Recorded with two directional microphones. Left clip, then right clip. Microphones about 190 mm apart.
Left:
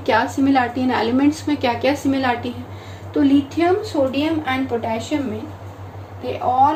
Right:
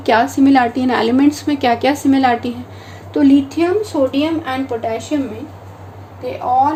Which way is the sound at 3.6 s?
60° right (ahead or behind).